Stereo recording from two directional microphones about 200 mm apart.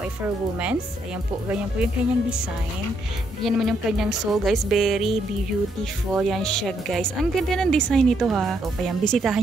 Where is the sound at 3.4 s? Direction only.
Centre (ahead or behind).